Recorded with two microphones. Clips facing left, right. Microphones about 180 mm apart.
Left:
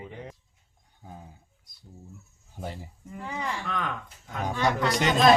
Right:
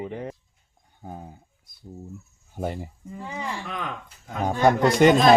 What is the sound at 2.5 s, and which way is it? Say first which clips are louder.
Speech: right 8 dB; 55° right (ahead or behind).